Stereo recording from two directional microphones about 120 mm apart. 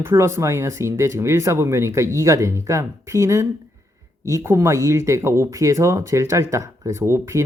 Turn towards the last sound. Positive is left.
turn(degrees=-25)  # may be behind; listen again after turning